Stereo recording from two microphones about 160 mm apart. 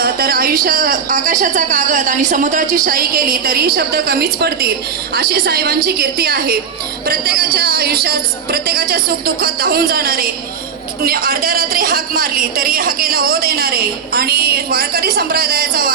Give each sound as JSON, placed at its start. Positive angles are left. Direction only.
{"t": 0.0, "sound": "a woman's voice", "side_deg": -70}